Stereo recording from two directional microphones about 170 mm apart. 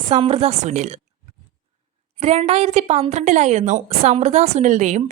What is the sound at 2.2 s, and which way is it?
A woman's voice, 35° right (ahead or behind).